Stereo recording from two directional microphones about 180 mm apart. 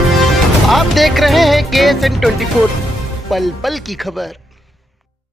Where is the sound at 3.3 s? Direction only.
Centre (ahead or behind).